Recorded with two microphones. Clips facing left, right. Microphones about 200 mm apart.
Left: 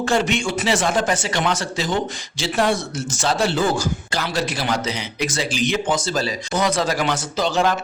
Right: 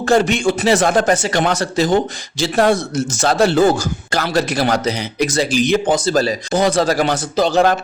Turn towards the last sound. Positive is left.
turn(degrees=-40)  # may be behind; listen again after turning